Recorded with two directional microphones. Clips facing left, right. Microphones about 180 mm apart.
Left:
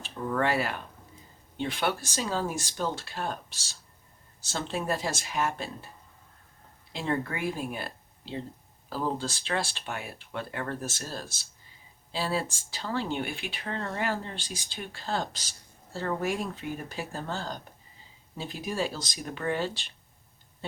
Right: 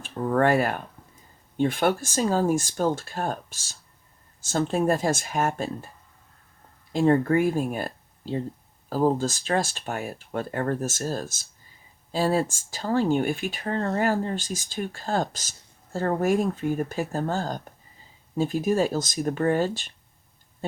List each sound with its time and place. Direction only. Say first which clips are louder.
0.0 s speech: right 6 dB; 50° right (ahead or behind)
6.9 s speech: right 11 dB; 45° right (ahead or behind)